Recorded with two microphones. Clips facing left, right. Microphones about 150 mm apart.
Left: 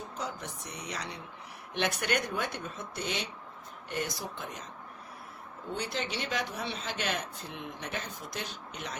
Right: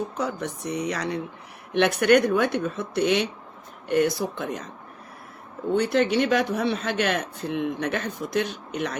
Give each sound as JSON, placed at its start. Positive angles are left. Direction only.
{"t": 0.1, "sound": "speech", "side_deg": -65}
{"t": 5.7, "sound": "speech", "side_deg": -60}